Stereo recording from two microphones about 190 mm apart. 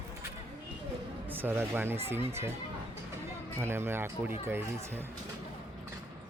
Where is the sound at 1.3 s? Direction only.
10° right (ahead or behind).